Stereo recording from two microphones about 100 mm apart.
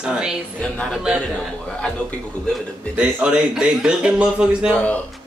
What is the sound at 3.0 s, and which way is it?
Speech, 10° right (ahead or behind).